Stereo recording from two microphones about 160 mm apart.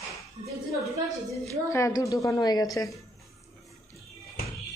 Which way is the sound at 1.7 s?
20° left (ahead or behind).